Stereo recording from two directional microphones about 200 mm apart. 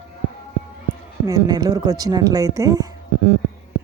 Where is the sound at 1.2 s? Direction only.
20° right (ahead or behind).